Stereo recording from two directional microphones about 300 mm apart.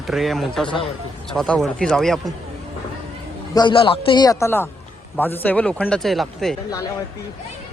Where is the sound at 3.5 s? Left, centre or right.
Centre.